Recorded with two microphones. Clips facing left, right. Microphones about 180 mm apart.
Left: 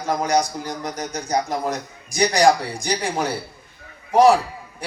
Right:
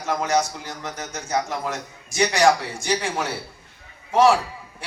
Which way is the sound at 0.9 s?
35° left (ahead or behind).